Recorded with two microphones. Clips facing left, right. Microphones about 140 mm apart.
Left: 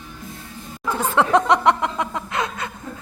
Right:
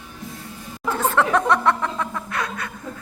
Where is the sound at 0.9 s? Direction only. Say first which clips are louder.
Left 2 dB; 15° left (ahead or behind).